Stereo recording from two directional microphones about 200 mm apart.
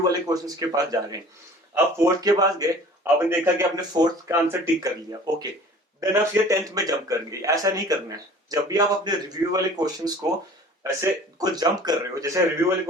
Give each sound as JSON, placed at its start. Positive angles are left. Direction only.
{"t": 0.0, "sound": "a man's voice", "side_deg": -20}